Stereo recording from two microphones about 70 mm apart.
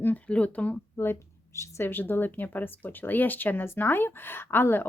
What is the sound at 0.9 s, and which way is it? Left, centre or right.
Speech, left.